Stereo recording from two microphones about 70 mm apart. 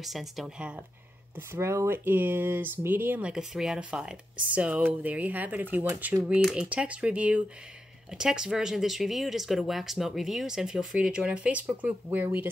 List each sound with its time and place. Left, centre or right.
0.0 s speech: centre
0.6 s speech: centre
1.3 s speech: right
3.2 s speech: centre